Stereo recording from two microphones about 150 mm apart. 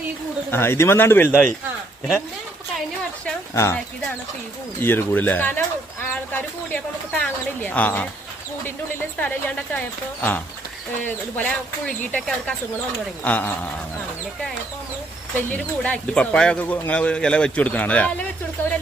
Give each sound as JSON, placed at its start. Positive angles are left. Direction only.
{"t": 0.5, "sound": "speech", "side_deg": 15}
{"t": 3.5, "sound": "speech", "side_deg": 20}
{"t": 4.8, "sound": "speech", "side_deg": 15}
{"t": 15.4, "sound": "speech", "side_deg": 10}